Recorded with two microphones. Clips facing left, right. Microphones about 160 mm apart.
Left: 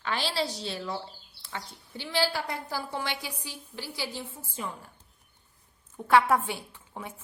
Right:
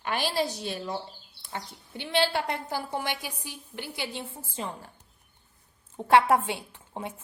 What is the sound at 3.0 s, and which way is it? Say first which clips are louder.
Speech: right 1 dB; 50° right (ahead or behind).